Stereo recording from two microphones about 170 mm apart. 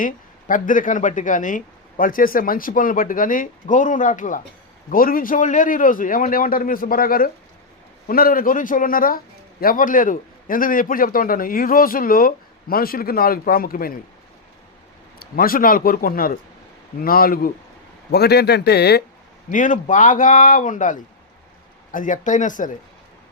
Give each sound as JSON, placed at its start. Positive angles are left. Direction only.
{"t": 0.0, "sound": "a man's voice", "side_deg": 50}
{"t": 15.2, "sound": "a man's voice", "side_deg": 60}
{"t": 18.1, "sound": "speech", "side_deg": 75}
{"t": 19.5, "sound": "speech", "side_deg": 50}